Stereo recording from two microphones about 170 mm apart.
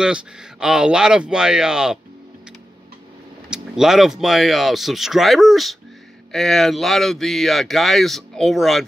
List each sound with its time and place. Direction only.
0.0 s speech: 5° right (ahead or behind)
3.4 s speech: 5° right (ahead or behind)